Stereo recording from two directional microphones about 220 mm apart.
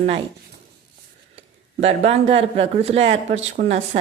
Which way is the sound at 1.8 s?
30° right (ahead or behind).